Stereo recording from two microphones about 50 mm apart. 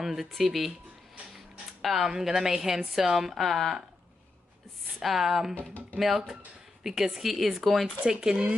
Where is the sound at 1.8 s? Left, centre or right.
Centre.